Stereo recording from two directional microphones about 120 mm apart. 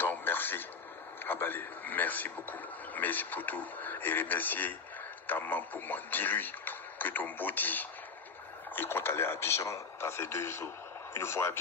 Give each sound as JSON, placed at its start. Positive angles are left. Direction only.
{"t": 0.0, "sound": "radio", "side_deg": 15}
{"t": 1.2, "sound": "a man's voice", "side_deg": 15}